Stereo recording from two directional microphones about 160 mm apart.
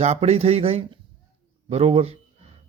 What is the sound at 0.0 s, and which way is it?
A man's voice, 45° right (ahead or behind).